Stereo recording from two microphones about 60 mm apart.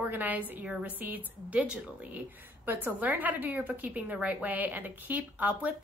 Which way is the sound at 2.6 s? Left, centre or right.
Right.